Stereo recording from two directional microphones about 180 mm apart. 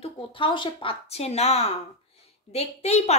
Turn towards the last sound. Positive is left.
turn(degrees=35)  # may be behind; listen again after turning